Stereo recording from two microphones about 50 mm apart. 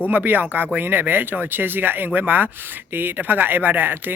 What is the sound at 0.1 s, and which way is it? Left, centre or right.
A man's voice, right.